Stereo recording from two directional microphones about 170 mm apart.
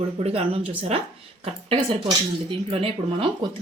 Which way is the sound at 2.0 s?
35° right (ahead or behind).